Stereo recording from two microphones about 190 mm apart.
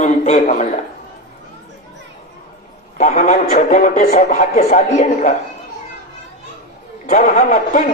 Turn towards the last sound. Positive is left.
turn(degrees=45)  # may be behind; listen again after turning